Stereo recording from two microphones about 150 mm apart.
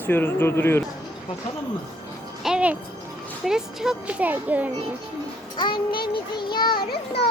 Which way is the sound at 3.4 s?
5° right (ahead or behind).